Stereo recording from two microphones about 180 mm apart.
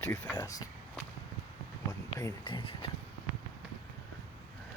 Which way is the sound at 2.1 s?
25° left (ahead or behind).